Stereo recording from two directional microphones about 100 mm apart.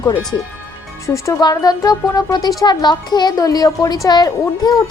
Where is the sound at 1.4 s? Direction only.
40° left (ahead or behind).